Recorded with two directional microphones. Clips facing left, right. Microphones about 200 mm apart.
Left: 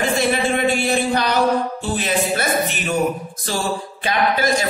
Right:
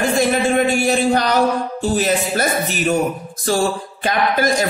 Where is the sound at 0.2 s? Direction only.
45° right (ahead or behind).